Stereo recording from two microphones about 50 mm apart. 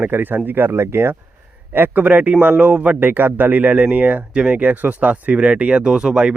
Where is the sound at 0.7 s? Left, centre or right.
Right.